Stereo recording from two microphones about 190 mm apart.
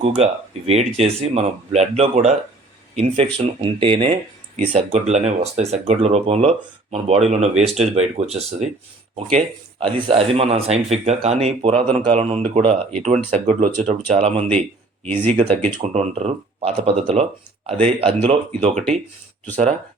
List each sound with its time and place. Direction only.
0.0 s speech: 30° right (ahead or behind)
9.8 s speech: 30° right (ahead or behind)